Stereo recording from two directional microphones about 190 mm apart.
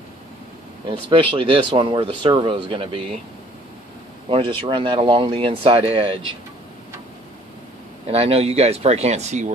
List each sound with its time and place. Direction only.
0.8 s speech: 25° right (ahead or behind)
4.3 s speech: 25° right (ahead or behind)
8.1 s speech: 30° right (ahead or behind)